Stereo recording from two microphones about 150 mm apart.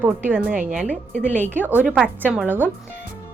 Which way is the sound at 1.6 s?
10° right (ahead or behind).